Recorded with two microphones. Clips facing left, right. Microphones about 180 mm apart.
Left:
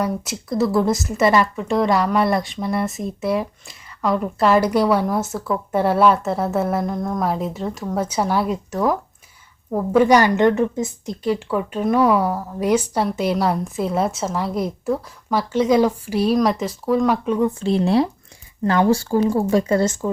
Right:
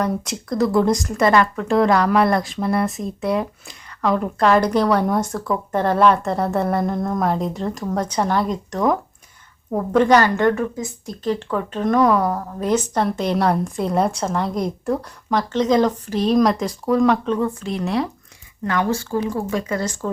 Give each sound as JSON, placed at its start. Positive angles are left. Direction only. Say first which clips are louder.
{"t": 0.0, "sound": "speech", "louder": "right 1 dB", "side_deg": 5}
{"t": 11.2, "sound": "speech", "louder": "left 1 dB", "side_deg": 10}
{"t": 17.6, "sound": "speech", "louder": "left 5 dB", "side_deg": 30}